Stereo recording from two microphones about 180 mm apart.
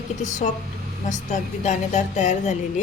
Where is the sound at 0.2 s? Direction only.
45° left (ahead or behind).